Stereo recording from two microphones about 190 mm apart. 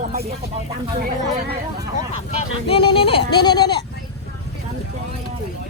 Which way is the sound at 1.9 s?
30° left (ahead or behind).